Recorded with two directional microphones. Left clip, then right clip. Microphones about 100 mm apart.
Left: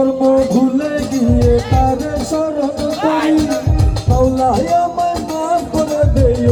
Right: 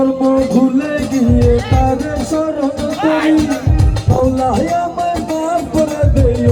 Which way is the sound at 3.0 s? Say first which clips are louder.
Right 2 dB; 20° left (ahead or behind).